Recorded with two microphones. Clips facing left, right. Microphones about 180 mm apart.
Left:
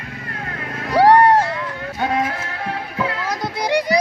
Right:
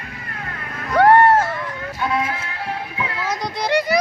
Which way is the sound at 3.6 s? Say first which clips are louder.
Even; 15° left (ahead or behind).